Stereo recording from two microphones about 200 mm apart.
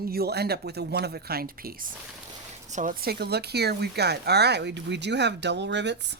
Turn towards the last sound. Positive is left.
turn(degrees=-60)  # may be behind; listen again after turning